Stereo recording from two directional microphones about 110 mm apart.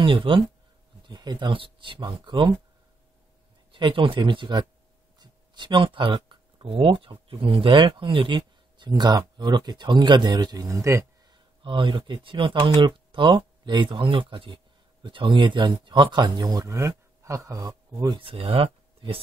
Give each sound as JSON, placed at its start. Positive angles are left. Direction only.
{"t": 0.0, "sound": "speech", "side_deg": -50}
{"t": 1.0, "sound": "speech", "side_deg": -40}
{"t": 3.7, "sound": "speech", "side_deg": -50}
{"t": 11.2, "sound": "speech", "side_deg": -45}
{"t": 18.2, "sound": "speech", "side_deg": -55}